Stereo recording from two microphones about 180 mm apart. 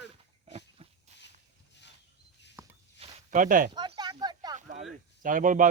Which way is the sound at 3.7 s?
25° right (ahead or behind).